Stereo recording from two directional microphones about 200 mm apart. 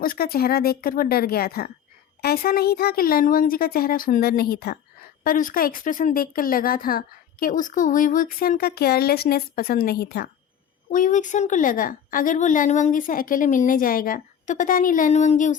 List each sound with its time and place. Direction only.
0.0 s speech: 50° left (ahead or behind)
10.9 s a woman's voice: 40° left (ahead or behind)